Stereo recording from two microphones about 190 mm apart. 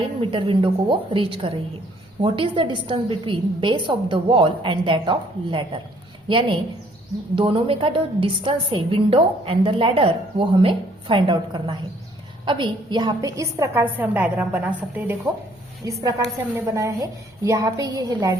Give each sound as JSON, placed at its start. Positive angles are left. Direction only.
{"t": 0.2, "sound": "a woman's voice", "side_deg": -25}